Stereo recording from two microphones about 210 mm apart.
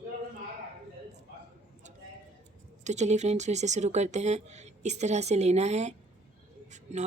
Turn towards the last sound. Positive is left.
turn(degrees=-35)  # may be behind; listen again after turning